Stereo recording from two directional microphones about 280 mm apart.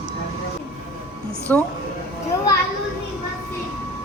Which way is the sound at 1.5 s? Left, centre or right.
Centre.